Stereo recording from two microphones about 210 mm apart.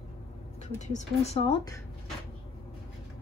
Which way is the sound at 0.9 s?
30° left (ahead or behind).